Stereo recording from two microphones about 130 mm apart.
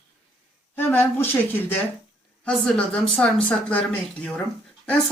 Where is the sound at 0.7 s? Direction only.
15° left (ahead or behind).